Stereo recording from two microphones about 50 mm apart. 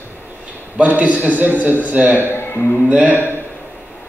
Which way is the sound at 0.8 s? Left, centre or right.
Right.